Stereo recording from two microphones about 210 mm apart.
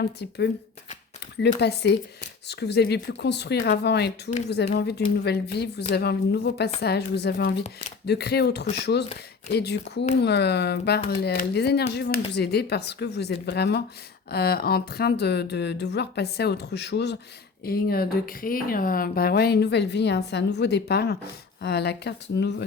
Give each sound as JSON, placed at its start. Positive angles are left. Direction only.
{"t": 0.0, "sound": "speech", "side_deg": 55}
{"t": 7.6, "sound": "speech", "side_deg": 30}
{"t": 8.0, "sound": "speech", "side_deg": 50}